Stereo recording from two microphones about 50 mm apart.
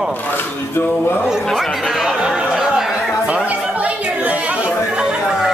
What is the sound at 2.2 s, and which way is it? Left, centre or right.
Chatter, centre.